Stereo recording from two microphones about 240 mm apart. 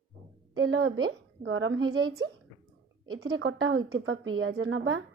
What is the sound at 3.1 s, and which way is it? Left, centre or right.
A woman's voice, right.